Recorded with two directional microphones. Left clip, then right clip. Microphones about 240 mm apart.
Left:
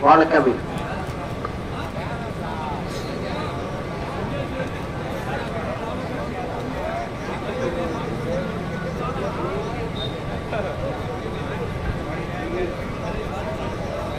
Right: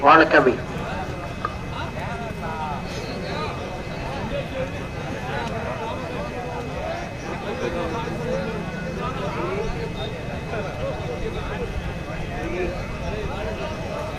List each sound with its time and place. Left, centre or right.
0.0 s a man's voice: centre